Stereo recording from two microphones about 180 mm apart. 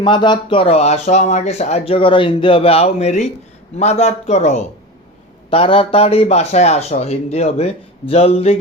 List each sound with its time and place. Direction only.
0.0 s speech: 25° left (ahead or behind)